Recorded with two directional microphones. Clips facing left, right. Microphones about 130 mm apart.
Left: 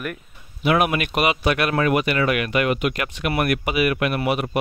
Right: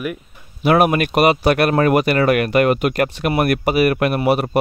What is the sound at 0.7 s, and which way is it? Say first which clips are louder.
Speech: right 5 dB; 40° right (ahead or behind).